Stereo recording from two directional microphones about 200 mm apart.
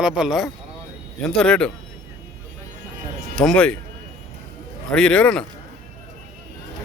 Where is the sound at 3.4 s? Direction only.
5° left (ahead or behind).